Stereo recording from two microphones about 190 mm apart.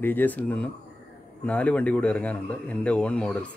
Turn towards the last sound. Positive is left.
turn(degrees=5)  # may be behind; listen again after turning